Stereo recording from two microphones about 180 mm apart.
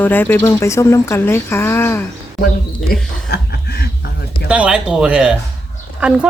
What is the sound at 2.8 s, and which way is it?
Chuckle, 65° left (ahead or behind).